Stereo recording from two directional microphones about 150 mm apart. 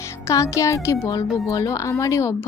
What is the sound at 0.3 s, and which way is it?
Speech, 20° left (ahead or behind).